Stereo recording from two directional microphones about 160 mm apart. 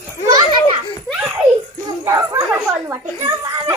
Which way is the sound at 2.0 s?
15° right (ahead or behind).